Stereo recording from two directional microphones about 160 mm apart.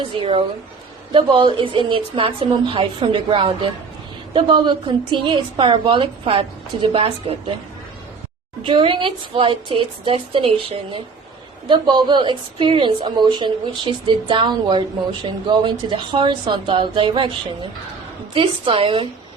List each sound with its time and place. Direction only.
0.0 s a woman's voice: 30° right (ahead or behind)
8.6 s a woman's voice: 35° right (ahead or behind)